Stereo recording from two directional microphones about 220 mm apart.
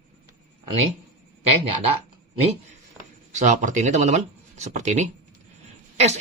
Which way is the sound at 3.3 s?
35° right (ahead or behind).